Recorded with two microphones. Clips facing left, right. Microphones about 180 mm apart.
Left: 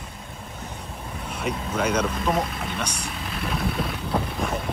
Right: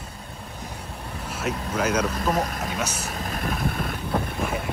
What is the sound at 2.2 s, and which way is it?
Speech, 40° right (ahead or behind).